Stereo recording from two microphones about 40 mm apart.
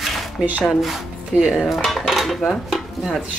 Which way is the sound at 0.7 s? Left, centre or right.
Centre.